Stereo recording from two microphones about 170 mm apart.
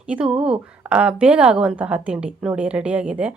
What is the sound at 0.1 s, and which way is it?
A woman's voice, 5° right (ahead or behind).